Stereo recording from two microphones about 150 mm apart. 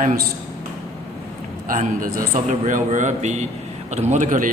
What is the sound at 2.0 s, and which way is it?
A man's voice, 60° right (ahead or behind).